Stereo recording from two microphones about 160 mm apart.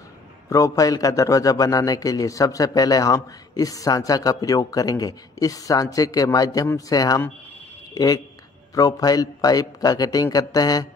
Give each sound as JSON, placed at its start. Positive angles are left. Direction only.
{"t": 0.5, "sound": "a man's voice", "side_deg": 20}